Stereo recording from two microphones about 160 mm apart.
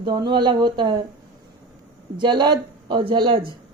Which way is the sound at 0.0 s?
25° right (ahead or behind).